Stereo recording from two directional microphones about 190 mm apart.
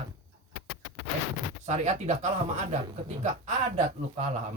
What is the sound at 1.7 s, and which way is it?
Speech, 40° right (ahead or behind).